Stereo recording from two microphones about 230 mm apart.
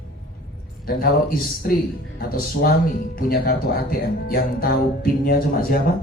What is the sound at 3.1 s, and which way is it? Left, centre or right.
Speech, left.